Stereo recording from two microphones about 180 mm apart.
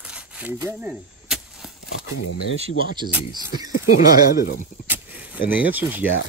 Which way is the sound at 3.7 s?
50° left (ahead or behind).